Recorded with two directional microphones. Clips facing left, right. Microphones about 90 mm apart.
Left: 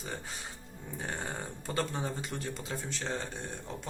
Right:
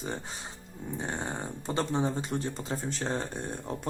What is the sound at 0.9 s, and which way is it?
Speech, 25° right (ahead or behind).